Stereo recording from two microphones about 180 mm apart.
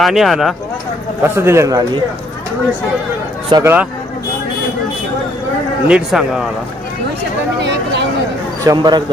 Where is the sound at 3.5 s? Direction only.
20° right (ahead or behind).